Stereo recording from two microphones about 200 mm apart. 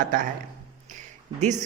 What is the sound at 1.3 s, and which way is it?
Speech, 35° right (ahead or behind).